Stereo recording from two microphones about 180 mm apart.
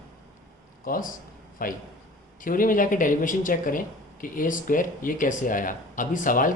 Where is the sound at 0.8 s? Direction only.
50° left (ahead or behind).